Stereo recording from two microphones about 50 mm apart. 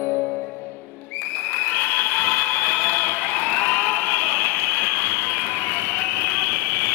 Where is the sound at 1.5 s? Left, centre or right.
Left.